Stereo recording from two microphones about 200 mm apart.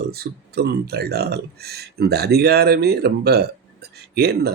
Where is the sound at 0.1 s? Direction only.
55° right (ahead or behind).